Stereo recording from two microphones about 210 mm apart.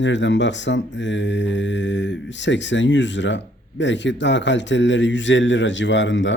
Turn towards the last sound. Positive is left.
turn(degrees=60)  # may be behind; listen again after turning